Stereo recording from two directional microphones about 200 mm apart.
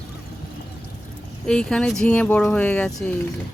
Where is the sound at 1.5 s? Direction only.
5° left (ahead or behind).